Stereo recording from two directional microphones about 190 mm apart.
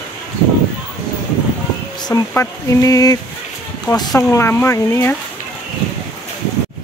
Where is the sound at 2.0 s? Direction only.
15° left (ahead or behind).